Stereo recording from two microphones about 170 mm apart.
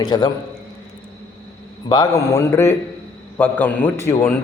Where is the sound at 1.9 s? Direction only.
20° left (ahead or behind).